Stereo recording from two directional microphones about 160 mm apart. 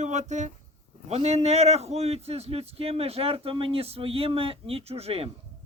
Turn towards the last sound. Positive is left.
turn(degrees=-40)  # may be behind; listen again after turning